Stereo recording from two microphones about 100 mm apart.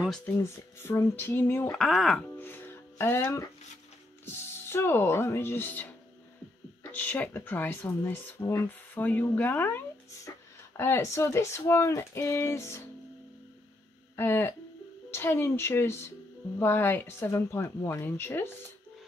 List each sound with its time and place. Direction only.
0.3 s speech: 25° left (ahead or behind)
1.7 s speech: centre (ahead or behind)
2.3 s music: 20° left (ahead or behind)
4.3 s speech: 25° left (ahead or behind)
14.1 s speech: 20° left (ahead or behind)